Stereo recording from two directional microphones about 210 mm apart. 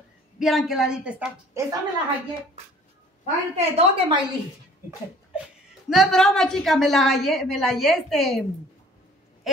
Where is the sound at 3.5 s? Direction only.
30° right (ahead or behind).